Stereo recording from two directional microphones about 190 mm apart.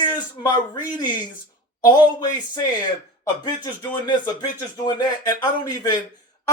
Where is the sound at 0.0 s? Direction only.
20° left (ahead or behind).